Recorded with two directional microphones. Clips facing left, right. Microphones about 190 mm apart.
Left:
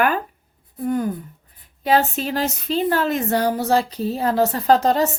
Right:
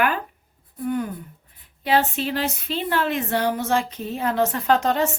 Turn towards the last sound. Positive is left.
turn(degrees=35)  # may be behind; listen again after turning